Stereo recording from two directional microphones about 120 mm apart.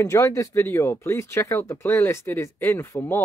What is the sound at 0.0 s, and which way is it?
Speech, 25° left (ahead or behind).